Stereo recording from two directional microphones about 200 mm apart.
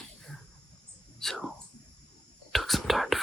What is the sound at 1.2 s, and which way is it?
Whispering, centre (ahead or behind).